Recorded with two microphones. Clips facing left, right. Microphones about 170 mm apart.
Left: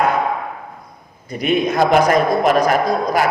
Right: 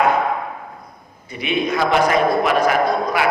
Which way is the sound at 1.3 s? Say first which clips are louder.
Left 3 dB; 45° left (ahead or behind).